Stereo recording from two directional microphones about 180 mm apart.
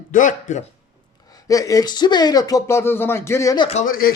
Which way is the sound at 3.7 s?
45° left (ahead or behind).